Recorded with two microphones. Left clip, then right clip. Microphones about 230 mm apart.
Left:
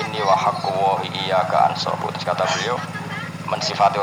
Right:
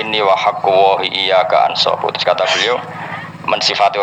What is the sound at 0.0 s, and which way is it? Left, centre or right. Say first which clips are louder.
Speech: right 5 dB; right.